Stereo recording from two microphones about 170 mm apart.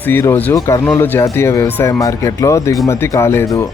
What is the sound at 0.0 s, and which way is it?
Speech, 15° left (ahead or behind).